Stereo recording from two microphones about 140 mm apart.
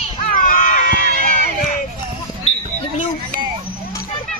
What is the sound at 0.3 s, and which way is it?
Run, 80° left.